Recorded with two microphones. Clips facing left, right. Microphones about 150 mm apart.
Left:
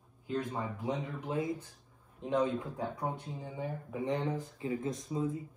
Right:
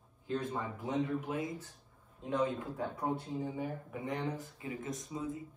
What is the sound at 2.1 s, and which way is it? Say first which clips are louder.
Speech: left 3 dB; 25° left (ahead or behind).